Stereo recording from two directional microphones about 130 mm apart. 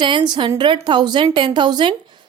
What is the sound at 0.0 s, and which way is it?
A woman's voice, 35° right (ahead or behind).